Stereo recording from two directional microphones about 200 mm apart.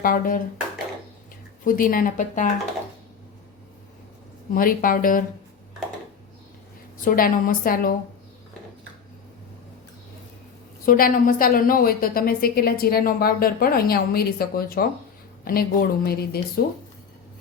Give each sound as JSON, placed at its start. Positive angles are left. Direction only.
{"t": 0.0, "sound": "a woman's voice", "side_deg": 45}
{"t": 1.6, "sound": "a woman's voice", "side_deg": 45}
{"t": 4.5, "sound": "a woman's voice", "side_deg": 45}
{"t": 7.0, "sound": "a woman's voice", "side_deg": 45}
{"t": 10.8, "sound": "a woman's voice", "side_deg": 45}